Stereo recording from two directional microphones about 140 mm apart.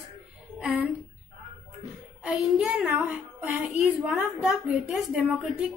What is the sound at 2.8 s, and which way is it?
A woman's voice, 15° right (ahead or behind).